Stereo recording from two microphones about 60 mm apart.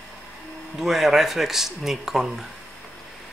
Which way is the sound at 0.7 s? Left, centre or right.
Centre.